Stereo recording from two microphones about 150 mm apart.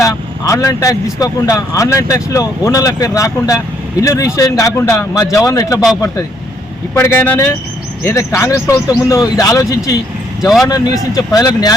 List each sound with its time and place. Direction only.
0.0 s a man's voice: 20° left (ahead or behind)
6.9 s a man's voice: 15° left (ahead or behind)